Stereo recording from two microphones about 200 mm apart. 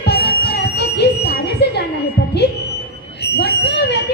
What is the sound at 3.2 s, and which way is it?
Fire alarm, 55° left (ahead or behind).